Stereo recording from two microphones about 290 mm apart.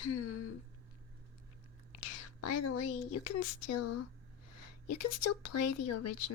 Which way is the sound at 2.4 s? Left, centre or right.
Left.